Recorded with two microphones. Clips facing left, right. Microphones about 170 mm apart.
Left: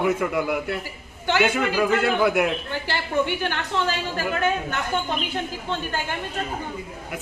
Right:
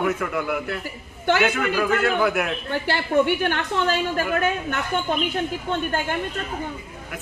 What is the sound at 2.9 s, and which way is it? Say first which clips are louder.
Speech: right 4 dB; 55° right (ahead or behind).